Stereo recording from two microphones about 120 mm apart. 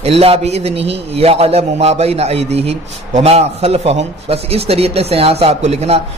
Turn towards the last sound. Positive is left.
turn(degrees=-60)  # may be behind; listen again after turning